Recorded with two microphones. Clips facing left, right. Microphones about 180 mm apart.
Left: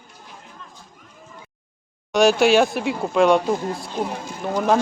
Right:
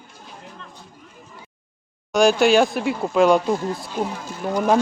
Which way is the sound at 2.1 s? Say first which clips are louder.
Even; centre (ahead or behind).